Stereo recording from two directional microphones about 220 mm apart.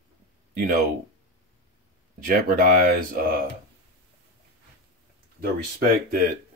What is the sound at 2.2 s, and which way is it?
Speech, 40° right (ahead or behind).